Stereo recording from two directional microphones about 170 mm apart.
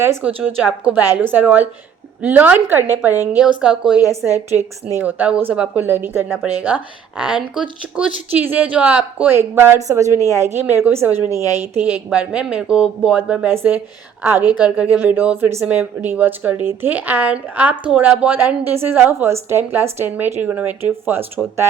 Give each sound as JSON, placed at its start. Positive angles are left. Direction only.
{"t": 0.0, "sound": "speech", "side_deg": -10}
{"t": 7.9, "sound": "speech", "side_deg": -10}
{"t": 14.4, "sound": "a woman's voice", "side_deg": 25}
{"t": 14.8, "sound": "speech", "side_deg": -10}